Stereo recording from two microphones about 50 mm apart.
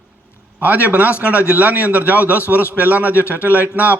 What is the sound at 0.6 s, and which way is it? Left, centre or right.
A man's voice, right.